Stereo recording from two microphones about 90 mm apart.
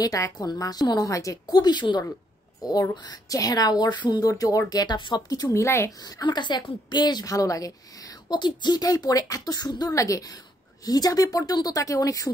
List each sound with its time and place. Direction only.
0.0 s a woman's voice: 40° left (ahead or behind)
1.5 s speech: 55° left (ahead or behind)
2.6 s speech: 45° left (ahead or behind)
5.5 s a woman's voice: 30° left (ahead or behind)
5.9 s speech: 45° left (ahead or behind)
8.3 s speech: 55° left (ahead or behind); by 12.3 s 40° left (ahead or behind)